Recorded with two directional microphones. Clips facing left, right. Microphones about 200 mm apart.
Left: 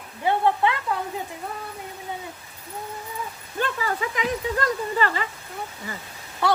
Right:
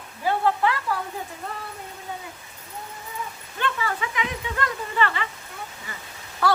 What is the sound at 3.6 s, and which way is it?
Speech, 40° left (ahead or behind).